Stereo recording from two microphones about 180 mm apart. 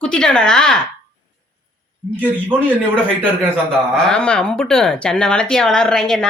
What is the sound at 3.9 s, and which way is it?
Speech, 5° left (ahead or behind).